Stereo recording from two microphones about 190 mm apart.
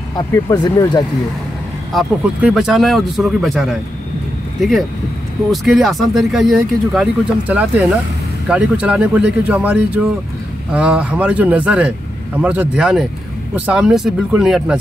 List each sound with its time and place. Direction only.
0.1 s speech: 15° left (ahead or behind)
1.9 s speech: centre (ahead or behind)